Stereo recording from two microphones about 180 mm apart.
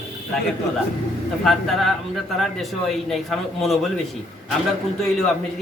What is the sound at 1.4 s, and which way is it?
A man's voice, centre (ahead or behind).